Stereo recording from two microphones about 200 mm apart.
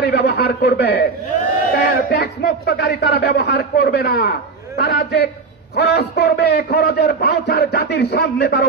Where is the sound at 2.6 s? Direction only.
55° left (ahead or behind).